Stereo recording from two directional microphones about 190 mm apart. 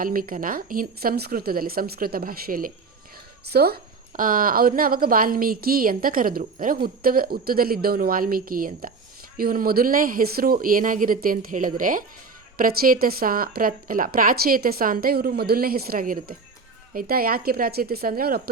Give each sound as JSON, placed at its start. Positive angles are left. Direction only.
{"t": 0.0, "sound": "a woman's voice", "side_deg": -50}